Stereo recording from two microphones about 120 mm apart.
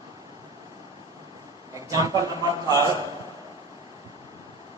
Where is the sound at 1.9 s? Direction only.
30° right (ahead or behind).